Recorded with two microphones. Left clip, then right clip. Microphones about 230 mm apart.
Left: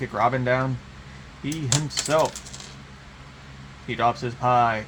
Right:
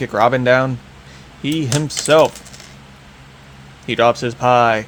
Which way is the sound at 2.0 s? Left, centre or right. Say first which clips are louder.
Right 10 dB; right.